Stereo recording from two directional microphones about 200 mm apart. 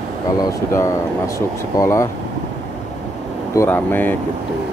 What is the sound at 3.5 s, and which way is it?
Speech, 10° left (ahead or behind).